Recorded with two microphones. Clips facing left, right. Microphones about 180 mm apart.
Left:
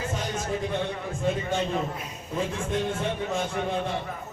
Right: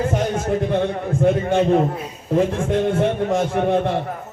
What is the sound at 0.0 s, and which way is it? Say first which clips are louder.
A man's voice: right 10 dB; 60° right (ahead or behind).